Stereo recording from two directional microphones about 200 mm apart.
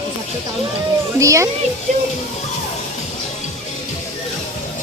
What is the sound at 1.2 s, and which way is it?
Speech, 15° right (ahead or behind).